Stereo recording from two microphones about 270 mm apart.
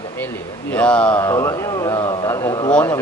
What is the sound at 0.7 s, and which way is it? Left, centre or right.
Speech, centre.